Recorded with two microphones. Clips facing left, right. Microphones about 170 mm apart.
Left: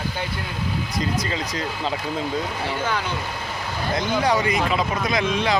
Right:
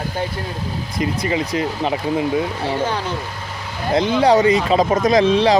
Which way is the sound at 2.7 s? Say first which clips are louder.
Right 4 dB; 35° right (ahead or behind).